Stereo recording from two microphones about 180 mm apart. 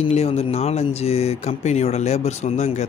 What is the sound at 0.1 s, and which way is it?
Speech, 35° left (ahead or behind).